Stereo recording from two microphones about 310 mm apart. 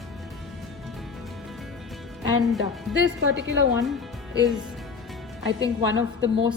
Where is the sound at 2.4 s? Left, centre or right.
Centre.